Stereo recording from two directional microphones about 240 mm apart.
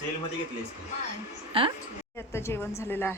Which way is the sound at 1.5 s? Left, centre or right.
Right.